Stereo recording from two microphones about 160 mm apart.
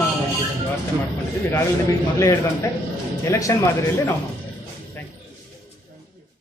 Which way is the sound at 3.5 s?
20° left (ahead or behind).